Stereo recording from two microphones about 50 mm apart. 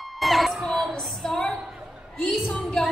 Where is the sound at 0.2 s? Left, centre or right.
Centre.